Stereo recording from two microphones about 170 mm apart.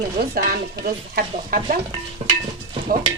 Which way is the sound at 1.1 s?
55° right (ahead or behind).